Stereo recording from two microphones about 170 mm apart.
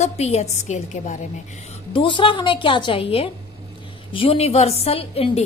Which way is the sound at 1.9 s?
30° left (ahead or behind).